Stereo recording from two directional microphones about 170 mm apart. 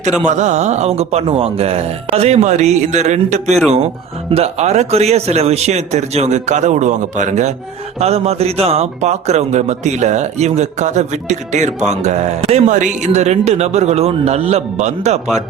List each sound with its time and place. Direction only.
0.3 s a man's voice: 45° right (ahead or behind)